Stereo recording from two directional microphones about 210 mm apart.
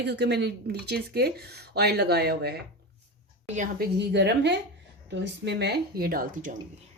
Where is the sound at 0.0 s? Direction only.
50° right (ahead or behind).